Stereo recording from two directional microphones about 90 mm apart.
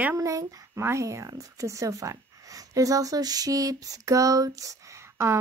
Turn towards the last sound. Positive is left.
turn(degrees=-35)  # may be behind; listen again after turning